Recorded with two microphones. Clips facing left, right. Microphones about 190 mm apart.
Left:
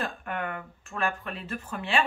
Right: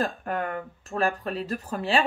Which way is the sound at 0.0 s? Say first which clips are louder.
Right 5 dB; 40° right (ahead or behind).